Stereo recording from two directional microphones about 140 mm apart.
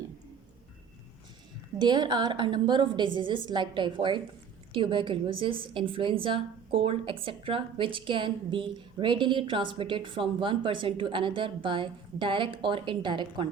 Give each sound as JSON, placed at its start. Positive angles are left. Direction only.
{"t": 1.8, "sound": "a woman's voice", "side_deg": -30}